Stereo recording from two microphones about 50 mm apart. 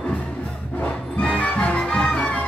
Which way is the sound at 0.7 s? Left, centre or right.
Left.